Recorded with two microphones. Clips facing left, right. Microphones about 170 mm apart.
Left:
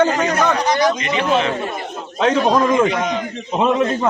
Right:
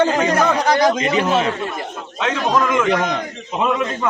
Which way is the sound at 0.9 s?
40° right (ahead or behind).